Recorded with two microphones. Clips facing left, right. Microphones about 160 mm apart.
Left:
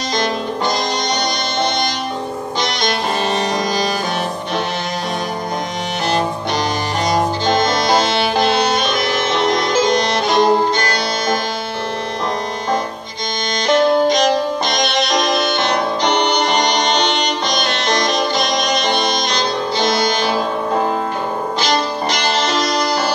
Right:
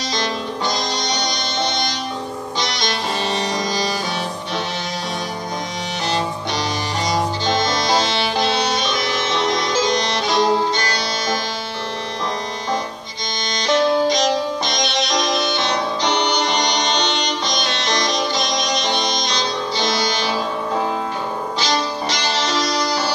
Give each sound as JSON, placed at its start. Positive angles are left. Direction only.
{"t": 0.1, "sound": "music", "side_deg": 55}
{"t": 2.6, "sound": "music", "side_deg": 55}
{"t": 7.1, "sound": "music", "side_deg": 55}
{"t": 13.7, "sound": "music", "side_deg": 55}